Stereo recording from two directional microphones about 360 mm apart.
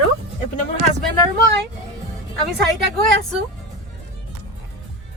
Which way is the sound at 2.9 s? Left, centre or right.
Right.